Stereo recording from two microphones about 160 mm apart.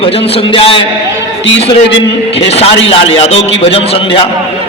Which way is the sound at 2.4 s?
40° left (ahead or behind).